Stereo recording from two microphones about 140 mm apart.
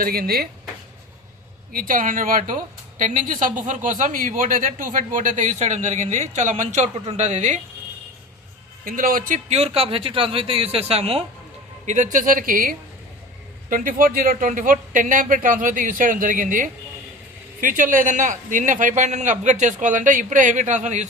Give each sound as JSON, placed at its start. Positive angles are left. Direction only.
{"t": 0.0, "sound": "speech", "side_deg": -90}
{"t": 1.7, "sound": "speech", "side_deg": -85}
{"t": 8.8, "sound": "speech", "side_deg": -85}
{"t": 9.5, "sound": "speech", "side_deg": -45}
{"t": 11.9, "sound": "speech", "side_deg": -65}
{"t": 13.7, "sound": "speech", "side_deg": -75}